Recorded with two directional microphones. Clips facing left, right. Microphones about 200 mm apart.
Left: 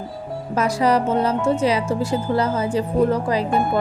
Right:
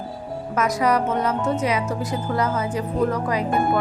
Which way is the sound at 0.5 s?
30° left (ahead or behind).